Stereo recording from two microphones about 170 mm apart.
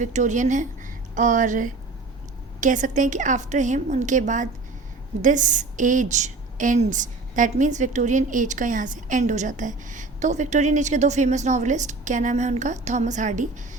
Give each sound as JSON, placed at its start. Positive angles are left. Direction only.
{"t": 0.0, "sound": "a woman's voice", "side_deg": -45}